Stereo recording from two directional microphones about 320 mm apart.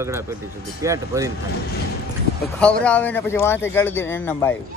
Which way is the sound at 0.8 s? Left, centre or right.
Centre.